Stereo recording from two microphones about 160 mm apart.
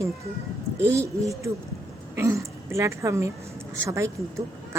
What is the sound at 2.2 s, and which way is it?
A woman's voice, 20° right (ahead or behind).